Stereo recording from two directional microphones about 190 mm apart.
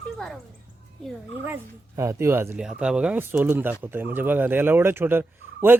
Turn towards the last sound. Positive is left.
turn(degrees=-10)  # may be behind; listen again after turning